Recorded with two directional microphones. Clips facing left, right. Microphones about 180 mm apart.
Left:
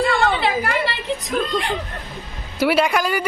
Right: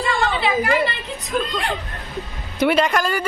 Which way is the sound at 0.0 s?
55° left (ahead or behind).